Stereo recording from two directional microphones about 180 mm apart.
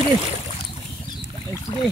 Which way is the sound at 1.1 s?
25° left (ahead or behind).